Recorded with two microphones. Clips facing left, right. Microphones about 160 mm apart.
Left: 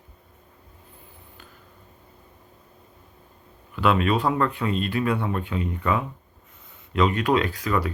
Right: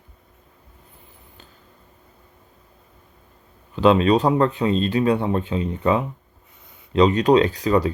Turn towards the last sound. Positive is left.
turn(degrees=-25)  # may be behind; listen again after turning